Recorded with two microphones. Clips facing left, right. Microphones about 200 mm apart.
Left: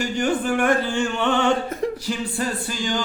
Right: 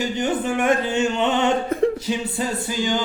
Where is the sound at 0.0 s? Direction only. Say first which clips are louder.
Even; 20° right (ahead or behind).